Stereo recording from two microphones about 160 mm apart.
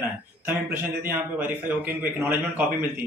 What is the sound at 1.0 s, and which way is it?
A man's voice, 10° right (ahead or behind).